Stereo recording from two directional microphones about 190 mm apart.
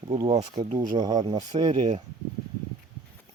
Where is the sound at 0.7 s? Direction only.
45° right (ahead or behind).